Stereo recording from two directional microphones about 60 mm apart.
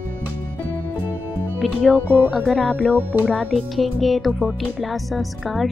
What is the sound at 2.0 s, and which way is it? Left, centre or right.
Speech, right.